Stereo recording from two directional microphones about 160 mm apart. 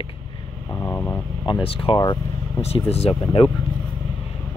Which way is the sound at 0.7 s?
15° left (ahead or behind).